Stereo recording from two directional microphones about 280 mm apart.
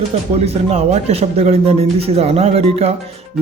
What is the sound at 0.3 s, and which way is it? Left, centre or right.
Speech, right.